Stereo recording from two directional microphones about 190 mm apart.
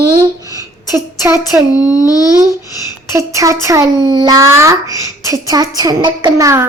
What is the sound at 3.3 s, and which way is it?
A child's voice, 15° right (ahead or behind).